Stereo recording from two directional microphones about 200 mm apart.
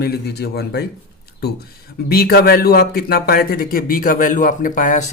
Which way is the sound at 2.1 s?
50° left (ahead or behind).